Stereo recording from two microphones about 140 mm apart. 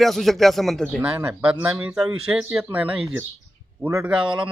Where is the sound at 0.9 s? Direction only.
10° right (ahead or behind).